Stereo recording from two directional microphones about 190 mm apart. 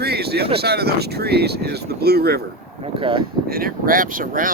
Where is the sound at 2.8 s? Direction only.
25° right (ahead or behind).